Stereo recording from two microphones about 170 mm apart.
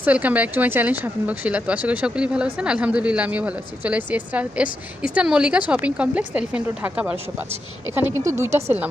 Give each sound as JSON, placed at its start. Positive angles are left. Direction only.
{"t": 0.0, "sound": "speech", "side_deg": -10}